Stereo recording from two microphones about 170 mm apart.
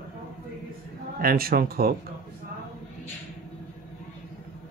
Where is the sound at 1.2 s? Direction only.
60° right (ahead or behind).